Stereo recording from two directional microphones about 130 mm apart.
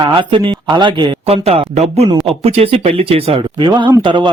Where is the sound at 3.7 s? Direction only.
35° right (ahead or behind).